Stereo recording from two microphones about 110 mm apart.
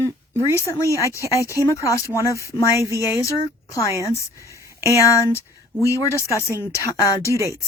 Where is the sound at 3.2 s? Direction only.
30° left (ahead or behind).